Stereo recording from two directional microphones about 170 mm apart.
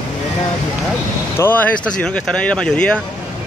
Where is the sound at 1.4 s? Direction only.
10° left (ahead or behind).